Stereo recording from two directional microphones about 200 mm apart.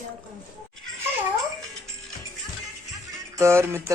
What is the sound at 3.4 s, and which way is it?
Music, 15° right (ahead or behind).